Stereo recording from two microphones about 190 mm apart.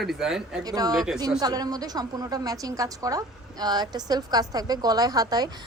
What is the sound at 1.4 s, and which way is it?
A woman's voice, 20° right (ahead or behind).